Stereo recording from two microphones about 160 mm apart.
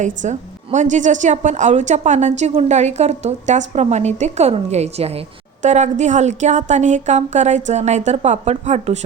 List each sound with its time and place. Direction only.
0.0 s a woman's voice: 50° right (ahead or behind)